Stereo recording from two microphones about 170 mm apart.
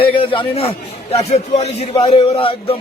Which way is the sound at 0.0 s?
30° left (ahead or behind).